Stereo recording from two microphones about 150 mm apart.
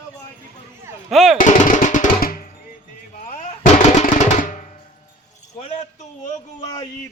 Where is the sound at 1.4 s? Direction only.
60° left (ahead or behind).